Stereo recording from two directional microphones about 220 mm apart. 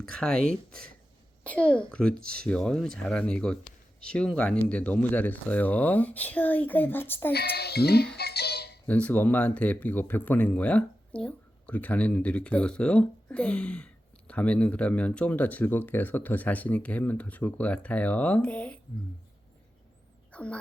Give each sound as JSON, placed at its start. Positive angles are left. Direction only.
{"t": 0.0, "sound": "speech", "side_deg": 5}
{"t": 7.3, "sound": "music", "side_deg": 45}
{"t": 8.9, "sound": "speech", "side_deg": 5}
{"t": 20.3, "sound": "fowl", "side_deg": 5}